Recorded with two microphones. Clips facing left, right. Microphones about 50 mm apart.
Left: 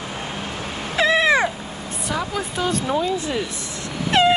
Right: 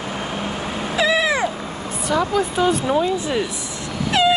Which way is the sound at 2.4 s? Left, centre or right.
Centre.